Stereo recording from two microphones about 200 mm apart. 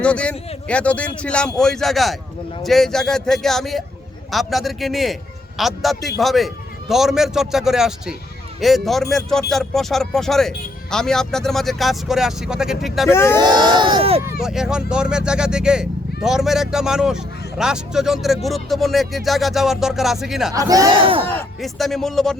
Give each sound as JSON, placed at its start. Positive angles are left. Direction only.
{"t": 0.0, "sound": "speech", "side_deg": 5}
{"t": 13.1, "sound": "speech", "side_deg": 10}
{"t": 13.4, "sound": "speech", "side_deg": -20}
{"t": 14.4, "sound": "speech", "side_deg": -5}
{"t": 20.5, "sound": "speech", "side_deg": -15}
{"t": 21.2, "sound": "speech", "side_deg": 0}